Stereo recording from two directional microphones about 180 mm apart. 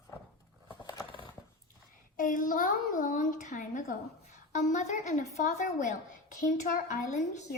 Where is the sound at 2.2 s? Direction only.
45° left (ahead or behind).